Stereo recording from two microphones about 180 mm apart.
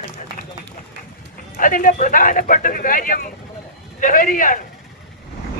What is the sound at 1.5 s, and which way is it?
Speech, 50° left (ahead or behind).